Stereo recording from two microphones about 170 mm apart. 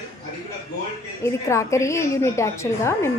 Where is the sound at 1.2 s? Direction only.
15° left (ahead or behind).